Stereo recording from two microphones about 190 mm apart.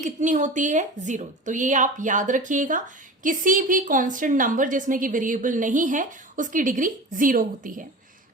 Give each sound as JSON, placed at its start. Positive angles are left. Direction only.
{"t": 0.0, "sound": "a woman's voice", "side_deg": -40}